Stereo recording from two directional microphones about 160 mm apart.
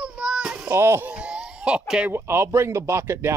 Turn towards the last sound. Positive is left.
turn(degrees=-15)  # may be behind; listen again after turning